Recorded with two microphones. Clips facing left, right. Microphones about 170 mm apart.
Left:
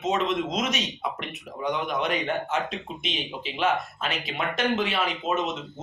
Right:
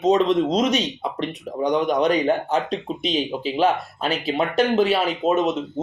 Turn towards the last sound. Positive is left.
turn(degrees=-35)  # may be behind; listen again after turning